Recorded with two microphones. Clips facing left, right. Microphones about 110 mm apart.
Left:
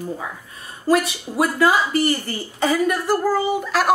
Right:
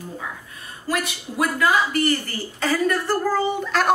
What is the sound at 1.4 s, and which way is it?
A woman's voice, 25° left (ahead or behind).